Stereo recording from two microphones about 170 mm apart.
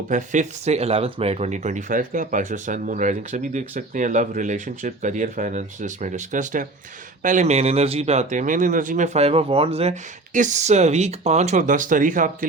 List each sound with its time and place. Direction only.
0.1 s speech: 45° right (ahead or behind)